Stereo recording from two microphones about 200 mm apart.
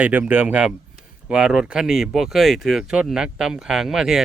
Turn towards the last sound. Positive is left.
turn(degrees=0)  # may be behind; listen again after turning